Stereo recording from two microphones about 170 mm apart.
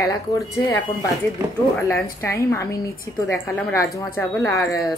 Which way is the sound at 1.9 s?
15° left (ahead or behind).